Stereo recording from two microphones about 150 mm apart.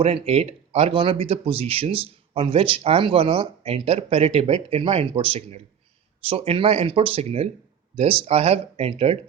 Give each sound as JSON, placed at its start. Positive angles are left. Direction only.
{"t": 0.0, "sound": "speech", "side_deg": -40}